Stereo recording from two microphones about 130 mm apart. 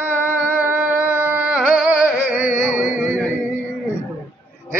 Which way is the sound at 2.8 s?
15° right (ahead or behind).